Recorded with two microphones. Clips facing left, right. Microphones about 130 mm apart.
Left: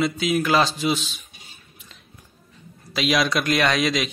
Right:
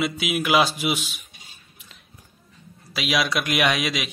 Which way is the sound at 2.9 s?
5° right (ahead or behind).